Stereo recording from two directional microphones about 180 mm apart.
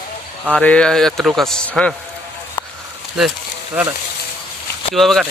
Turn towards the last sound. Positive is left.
turn(degrees=0)  # may be behind; listen again after turning